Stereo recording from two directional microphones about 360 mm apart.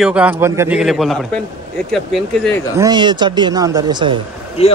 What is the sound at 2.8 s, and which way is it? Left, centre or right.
A man's voice, centre.